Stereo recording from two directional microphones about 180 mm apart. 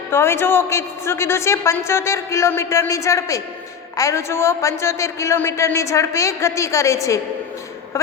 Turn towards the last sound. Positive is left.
turn(degrees=15)  # may be behind; listen again after turning